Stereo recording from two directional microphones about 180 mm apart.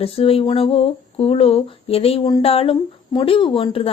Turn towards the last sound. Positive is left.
turn(degrees=30)  # may be behind; listen again after turning